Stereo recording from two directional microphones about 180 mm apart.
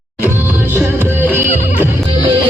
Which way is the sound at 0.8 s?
10° right (ahead or behind).